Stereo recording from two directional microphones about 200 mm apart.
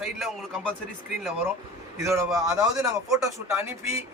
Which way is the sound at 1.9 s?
15° right (ahead or behind).